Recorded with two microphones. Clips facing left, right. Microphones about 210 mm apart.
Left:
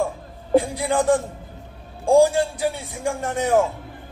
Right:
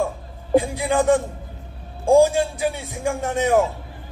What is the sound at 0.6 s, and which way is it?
Music, 15° right (ahead or behind).